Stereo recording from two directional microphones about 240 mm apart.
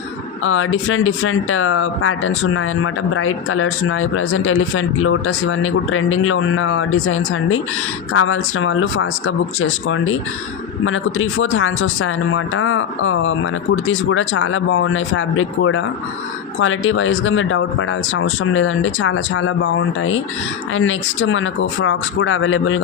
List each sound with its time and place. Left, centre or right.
0.4 s speech: left